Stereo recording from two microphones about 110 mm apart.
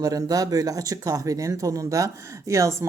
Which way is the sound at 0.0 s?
35° right (ahead or behind).